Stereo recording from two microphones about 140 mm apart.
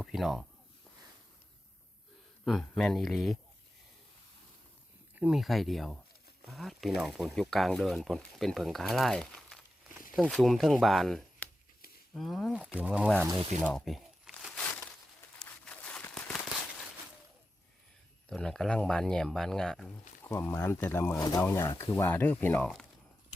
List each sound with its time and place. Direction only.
0.0 s speech: centre (ahead or behind)
2.4 s speech: centre (ahead or behind)
5.1 s speech: 5° right (ahead or behind)
13.7 s crumpling: centre (ahead or behind)
15.4 s a sound: 5° left (ahead or behind)
18.3 s speech: 5° left (ahead or behind)
20.2 s speech: 15° left (ahead or behind)
21.2 s speech: 25° left (ahead or behind)